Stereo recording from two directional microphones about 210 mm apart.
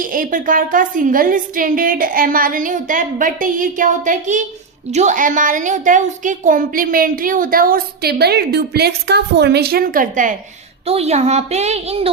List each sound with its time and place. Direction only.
0.0 s a woman's voice: 40° right (ahead or behind)
10.8 s a woman's voice: 30° right (ahead or behind)